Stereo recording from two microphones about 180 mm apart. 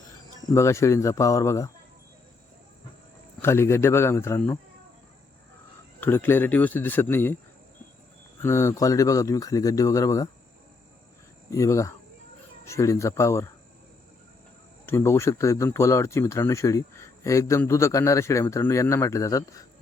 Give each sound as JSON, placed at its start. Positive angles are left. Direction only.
{"t": 0.5, "sound": "a man's voice", "side_deg": 15}
{"t": 3.4, "sound": "a man's voice", "side_deg": 15}
{"t": 6.0, "sound": "a man's voice", "side_deg": 10}
{"t": 8.4, "sound": "speech", "side_deg": 15}
{"t": 11.5, "sound": "a man's voice", "side_deg": 15}
{"t": 14.8, "sound": "a man's voice", "side_deg": 15}